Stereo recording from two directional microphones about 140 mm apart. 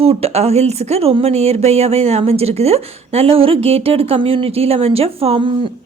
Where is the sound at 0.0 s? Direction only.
45° right (ahead or behind).